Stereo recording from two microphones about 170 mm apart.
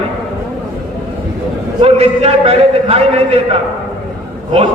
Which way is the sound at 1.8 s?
35° right (ahead or behind).